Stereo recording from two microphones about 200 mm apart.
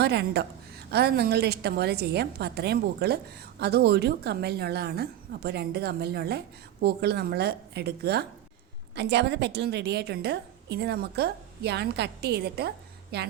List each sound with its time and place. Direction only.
0.0 s a woman's voice: 55° right (ahead or behind)